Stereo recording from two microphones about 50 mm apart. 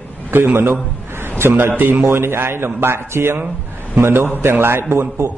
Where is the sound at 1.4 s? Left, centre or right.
Right.